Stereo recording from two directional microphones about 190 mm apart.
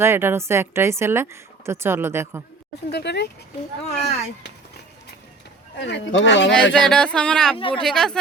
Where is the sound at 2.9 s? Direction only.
60° left (ahead or behind).